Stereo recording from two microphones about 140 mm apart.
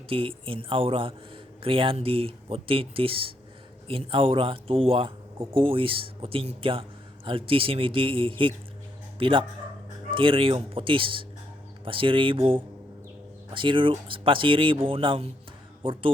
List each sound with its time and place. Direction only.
0.1 s speech: 40° right (ahead or behind)